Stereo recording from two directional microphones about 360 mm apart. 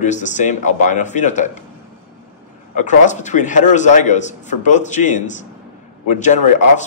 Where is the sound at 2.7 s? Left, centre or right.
Centre.